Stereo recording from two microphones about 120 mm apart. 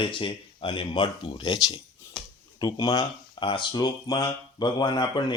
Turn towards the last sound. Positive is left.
turn(degrees=40)  # may be behind; listen again after turning